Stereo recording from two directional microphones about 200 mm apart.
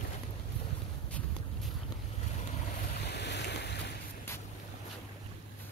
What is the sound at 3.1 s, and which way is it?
Boat, 55° left (ahead or behind).